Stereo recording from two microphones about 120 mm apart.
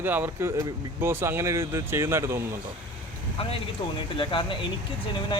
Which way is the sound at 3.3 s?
50° left (ahead or behind).